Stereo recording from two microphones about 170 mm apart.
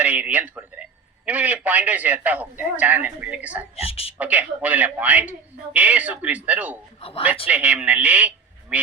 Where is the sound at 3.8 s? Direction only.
35° left (ahead or behind).